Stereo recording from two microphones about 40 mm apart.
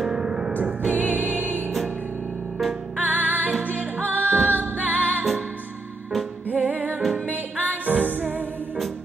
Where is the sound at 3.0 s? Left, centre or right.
Right.